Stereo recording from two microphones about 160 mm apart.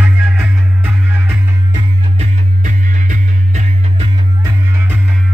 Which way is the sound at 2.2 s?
50° right (ahead or behind).